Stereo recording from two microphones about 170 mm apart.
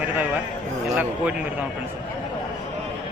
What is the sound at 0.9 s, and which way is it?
Speech, 10° right (ahead or behind).